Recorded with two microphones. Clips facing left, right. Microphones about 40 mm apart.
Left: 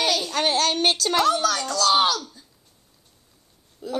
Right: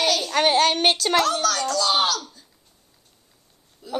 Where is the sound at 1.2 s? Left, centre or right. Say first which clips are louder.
Left 1 dB; centre.